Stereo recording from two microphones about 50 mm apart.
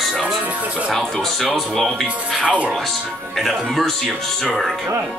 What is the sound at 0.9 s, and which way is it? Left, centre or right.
Speech, centre.